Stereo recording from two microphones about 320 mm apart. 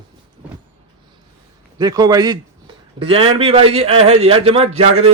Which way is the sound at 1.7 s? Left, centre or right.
Centre.